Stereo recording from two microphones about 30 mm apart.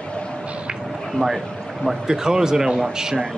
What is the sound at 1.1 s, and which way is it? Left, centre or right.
Speech, centre.